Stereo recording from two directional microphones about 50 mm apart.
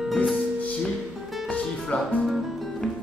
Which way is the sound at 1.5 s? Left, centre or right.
Left.